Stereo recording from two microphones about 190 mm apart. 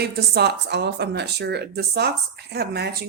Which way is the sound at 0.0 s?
60° right (ahead or behind).